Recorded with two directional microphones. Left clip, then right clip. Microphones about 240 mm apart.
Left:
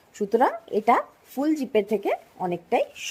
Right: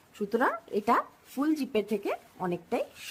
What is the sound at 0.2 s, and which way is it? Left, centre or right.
Speech, centre.